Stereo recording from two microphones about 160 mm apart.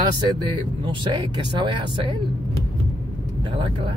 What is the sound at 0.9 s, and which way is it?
Speech, 30° right (ahead or behind).